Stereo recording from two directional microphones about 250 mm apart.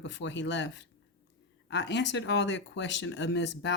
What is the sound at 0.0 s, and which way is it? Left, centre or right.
Speech, left.